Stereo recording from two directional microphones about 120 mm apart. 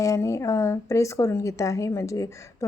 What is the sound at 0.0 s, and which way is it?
Speech, 25° left (ahead or behind).